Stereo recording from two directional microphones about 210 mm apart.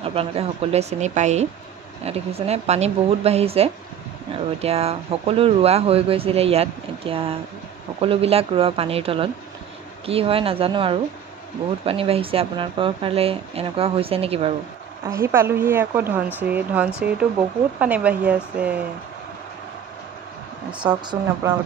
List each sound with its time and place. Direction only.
0.0 s a woman's voice: 25° right (ahead or behind)
15.0 s a woman's voice: 10° right (ahead or behind)
20.8 s speech: 20° right (ahead or behind)